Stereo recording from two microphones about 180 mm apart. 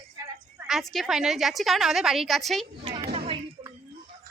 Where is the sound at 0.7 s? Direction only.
Centre (ahead or behind).